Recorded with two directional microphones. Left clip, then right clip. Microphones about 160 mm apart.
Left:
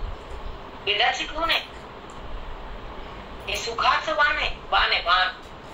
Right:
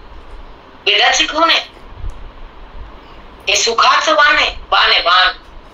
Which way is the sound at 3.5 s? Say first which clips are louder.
Right 11 dB; 60° right (ahead or behind).